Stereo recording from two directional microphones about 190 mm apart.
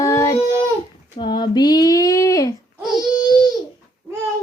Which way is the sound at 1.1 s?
25° left (ahead or behind).